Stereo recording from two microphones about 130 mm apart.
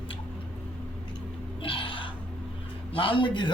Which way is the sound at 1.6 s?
40° left (ahead or behind).